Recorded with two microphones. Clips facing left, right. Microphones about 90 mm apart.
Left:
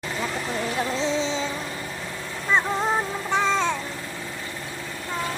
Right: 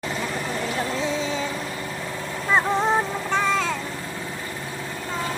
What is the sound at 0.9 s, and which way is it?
Music, 25° left (ahead or behind).